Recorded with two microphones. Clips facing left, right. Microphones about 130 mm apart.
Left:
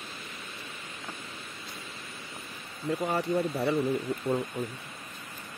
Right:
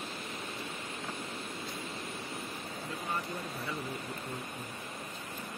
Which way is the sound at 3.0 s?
75° left (ahead or behind).